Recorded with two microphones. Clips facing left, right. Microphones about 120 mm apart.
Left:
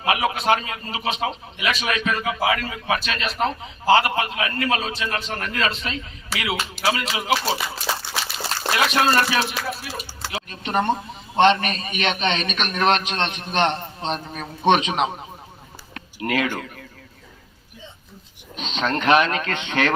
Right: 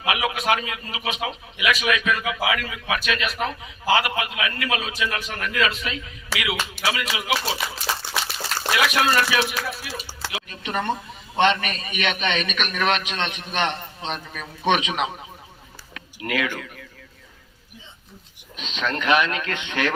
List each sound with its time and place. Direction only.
0.0 s a man's voice: 35° left (ahead or behind)
8.7 s a man's voice: 30° left (ahead or behind)
16.0 s a sound: 35° left (ahead or behind)
18.5 s a man's voice: 35° left (ahead or behind)